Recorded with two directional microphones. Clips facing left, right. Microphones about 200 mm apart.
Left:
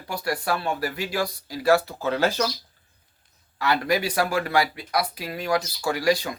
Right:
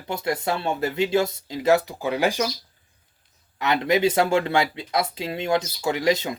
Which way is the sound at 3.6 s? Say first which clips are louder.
Right 3 dB; 20° right (ahead or behind).